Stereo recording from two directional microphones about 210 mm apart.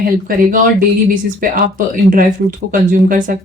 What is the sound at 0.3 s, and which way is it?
Speech, 45° right (ahead or behind).